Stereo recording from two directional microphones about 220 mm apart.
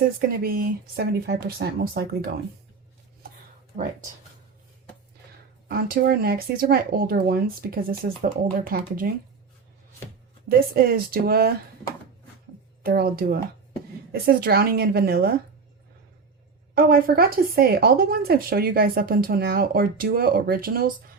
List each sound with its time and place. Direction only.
0.2 s speech: 40° right (ahead or behind)
5.6 s speech: 45° right (ahead or behind)
10.8 s speech: 45° right (ahead or behind)
12.8 s speech: 45° right (ahead or behind)
16.7 s speech: 45° right (ahead or behind)